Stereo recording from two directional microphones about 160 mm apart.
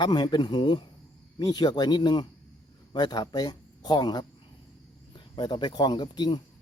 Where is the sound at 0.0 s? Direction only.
25° left (ahead or behind).